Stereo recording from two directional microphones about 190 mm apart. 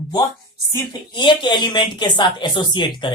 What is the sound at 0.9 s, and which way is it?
Speech, 25° left (ahead or behind).